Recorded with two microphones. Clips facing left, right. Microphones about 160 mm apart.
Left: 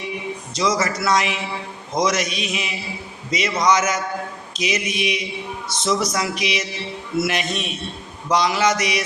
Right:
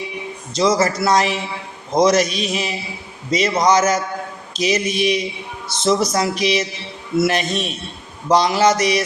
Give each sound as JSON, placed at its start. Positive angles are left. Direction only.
{"t": 0.5, "sound": "speech", "side_deg": -30}